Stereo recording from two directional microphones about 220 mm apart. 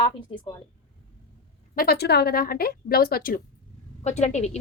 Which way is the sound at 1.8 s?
45° left (ahead or behind).